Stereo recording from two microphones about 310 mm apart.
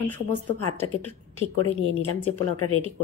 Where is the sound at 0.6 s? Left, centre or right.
Left.